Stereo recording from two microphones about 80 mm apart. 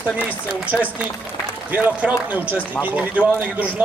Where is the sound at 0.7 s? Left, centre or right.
Centre.